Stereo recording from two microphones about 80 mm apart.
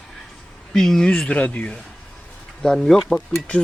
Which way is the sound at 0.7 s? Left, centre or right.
Centre.